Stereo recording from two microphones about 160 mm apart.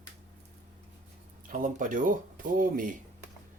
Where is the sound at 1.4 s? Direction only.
55° right (ahead or behind).